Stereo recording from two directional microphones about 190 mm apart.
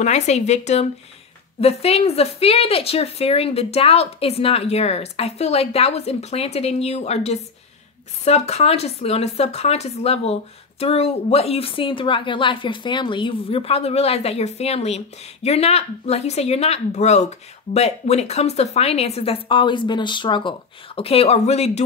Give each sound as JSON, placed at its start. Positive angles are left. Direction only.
{"t": 0.0, "sound": "speech", "side_deg": 35}